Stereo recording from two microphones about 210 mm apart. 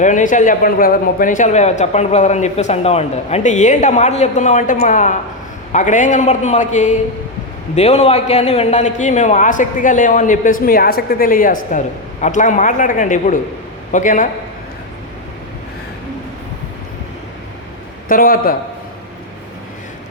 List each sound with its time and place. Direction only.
0.0 s a man's voice: 35° left (ahead or behind)
18.1 s a man's voice: 45° left (ahead or behind)